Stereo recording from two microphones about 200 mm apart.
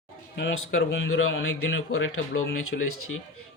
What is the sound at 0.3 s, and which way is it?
Speech, 60° left (ahead or behind).